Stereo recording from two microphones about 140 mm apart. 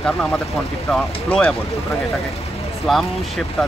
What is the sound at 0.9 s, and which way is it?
Speech, 5° left (ahead or behind).